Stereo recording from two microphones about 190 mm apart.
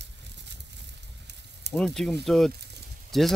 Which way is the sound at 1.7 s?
Centre (ahead or behind).